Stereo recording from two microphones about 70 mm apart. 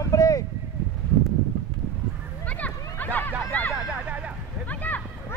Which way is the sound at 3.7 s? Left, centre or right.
Centre.